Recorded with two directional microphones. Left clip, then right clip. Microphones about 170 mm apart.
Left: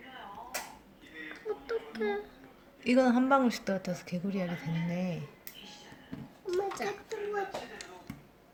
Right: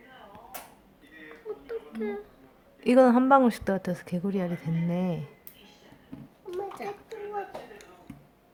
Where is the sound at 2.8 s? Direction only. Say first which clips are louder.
Right 7 dB; 35° right (ahead or behind).